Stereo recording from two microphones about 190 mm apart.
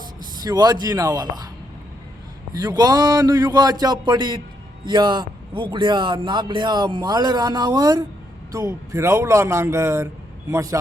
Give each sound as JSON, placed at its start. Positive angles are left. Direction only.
{"t": 0.4, "sound": "speech", "side_deg": -20}
{"t": 2.5, "sound": "a man's voice", "side_deg": -20}